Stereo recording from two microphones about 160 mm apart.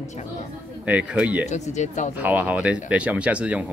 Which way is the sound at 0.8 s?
10° right (ahead or behind).